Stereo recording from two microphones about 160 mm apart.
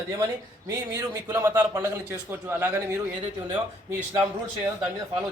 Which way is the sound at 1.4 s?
15° right (ahead or behind).